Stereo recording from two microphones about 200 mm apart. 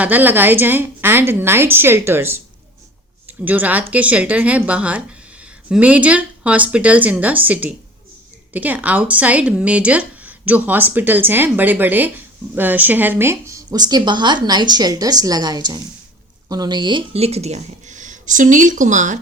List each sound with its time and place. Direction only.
0.0 s speech: 10° right (ahead or behind); by 19.2 s 40° right (ahead or behind)